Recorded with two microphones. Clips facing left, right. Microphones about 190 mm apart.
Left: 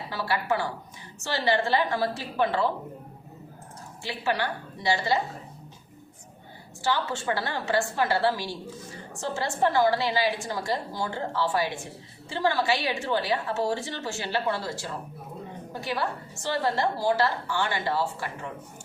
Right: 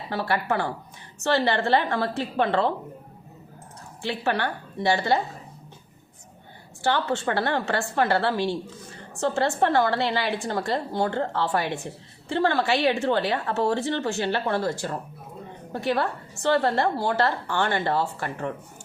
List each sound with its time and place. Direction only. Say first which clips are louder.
0.1 s a woman's voice: right 2 dB; 55° right (ahead or behind)
4.0 s a woman's voice: right 3 dB; 60° right (ahead or behind)
6.8 s a woman's voice: right 3 dB; 60° right (ahead or behind)